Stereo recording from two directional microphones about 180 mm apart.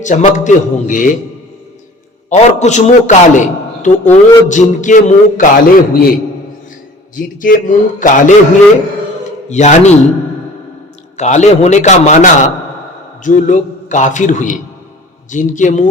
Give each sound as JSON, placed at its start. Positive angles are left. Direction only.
{"t": 0.0, "sound": "speech", "side_deg": 45}
{"t": 2.3, "sound": "a man's voice", "side_deg": 40}
{"t": 7.2, "sound": "speech", "side_deg": 50}
{"t": 9.5, "sound": "a man's voice", "side_deg": 40}
{"t": 11.2, "sound": "a man's voice", "side_deg": 40}